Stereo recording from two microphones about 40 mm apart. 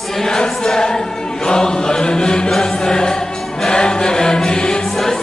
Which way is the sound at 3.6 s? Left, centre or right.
Centre.